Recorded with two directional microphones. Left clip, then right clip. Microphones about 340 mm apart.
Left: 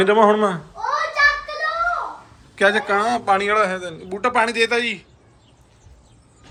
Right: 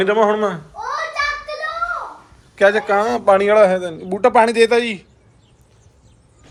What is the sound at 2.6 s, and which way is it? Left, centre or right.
A man's voice, centre.